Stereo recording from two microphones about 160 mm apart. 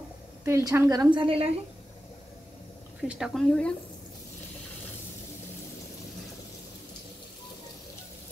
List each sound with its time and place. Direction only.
0.5 s a woman's voice: 15° right (ahead or behind); by 1.5 s 35° right (ahead or behind)
3.1 s speech: centre (ahead or behind)